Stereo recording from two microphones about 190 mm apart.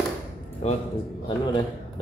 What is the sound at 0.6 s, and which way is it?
Speech, 35° left (ahead or behind).